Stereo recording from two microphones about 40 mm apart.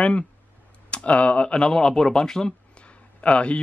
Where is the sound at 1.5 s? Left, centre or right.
Left.